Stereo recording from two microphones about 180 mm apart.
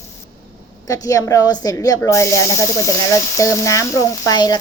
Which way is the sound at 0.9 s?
20° left (ahead or behind).